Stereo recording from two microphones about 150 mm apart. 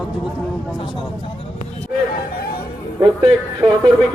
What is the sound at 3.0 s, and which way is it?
Speech, 30° right (ahead or behind).